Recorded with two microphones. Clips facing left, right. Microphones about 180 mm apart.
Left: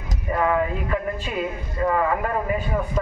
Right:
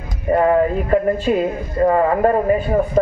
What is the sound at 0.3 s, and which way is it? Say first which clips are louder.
A man's voice: right 7 dB; 45° right (ahead or behind).